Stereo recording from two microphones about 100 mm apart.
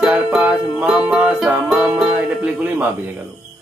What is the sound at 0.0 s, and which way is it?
Music, 10° right (ahead or behind).